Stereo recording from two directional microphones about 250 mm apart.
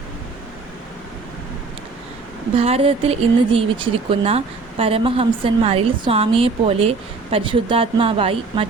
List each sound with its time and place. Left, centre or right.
2.6 s speech: right